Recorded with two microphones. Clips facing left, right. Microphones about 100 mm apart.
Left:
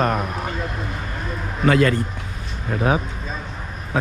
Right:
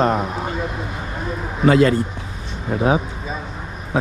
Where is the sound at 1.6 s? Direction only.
30° right (ahead or behind).